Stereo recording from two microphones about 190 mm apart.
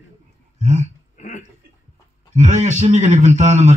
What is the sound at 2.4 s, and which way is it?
Speech, 40° right (ahead or behind).